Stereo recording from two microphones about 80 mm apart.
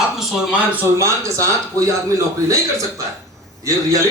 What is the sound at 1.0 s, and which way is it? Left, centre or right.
A man's voice, right.